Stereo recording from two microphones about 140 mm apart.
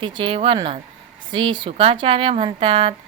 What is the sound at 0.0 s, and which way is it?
Speech, 40° right (ahead or behind).